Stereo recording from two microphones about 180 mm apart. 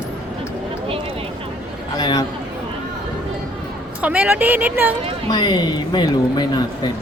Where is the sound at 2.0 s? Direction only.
25° left (ahead or behind).